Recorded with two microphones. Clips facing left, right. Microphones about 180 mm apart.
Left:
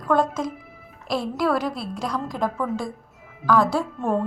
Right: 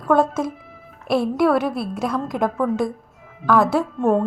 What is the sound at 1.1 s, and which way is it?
A woman's voice, 25° right (ahead or behind).